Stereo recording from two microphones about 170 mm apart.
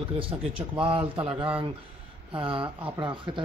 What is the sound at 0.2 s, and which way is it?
A man's voice, 30° right (ahead or behind).